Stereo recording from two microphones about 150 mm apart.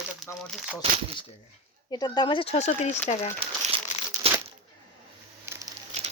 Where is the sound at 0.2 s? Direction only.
Centre (ahead or behind).